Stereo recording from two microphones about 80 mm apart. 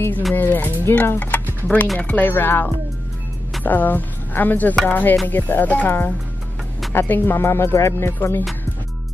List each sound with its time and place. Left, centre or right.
0.3 s speech: left